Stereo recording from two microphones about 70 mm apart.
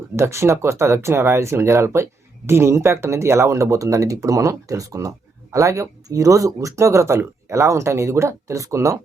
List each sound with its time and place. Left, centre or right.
0.2 s speech: right